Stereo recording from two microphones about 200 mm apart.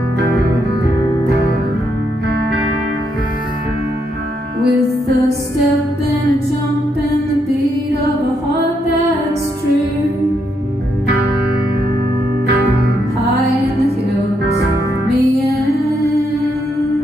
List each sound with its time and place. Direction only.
4.6 s music: 55° right (ahead or behind)